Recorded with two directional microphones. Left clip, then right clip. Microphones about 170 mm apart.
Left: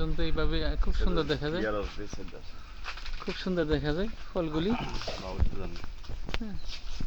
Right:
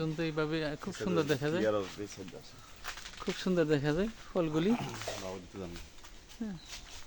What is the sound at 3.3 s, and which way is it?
Speech, 10° right (ahead or behind).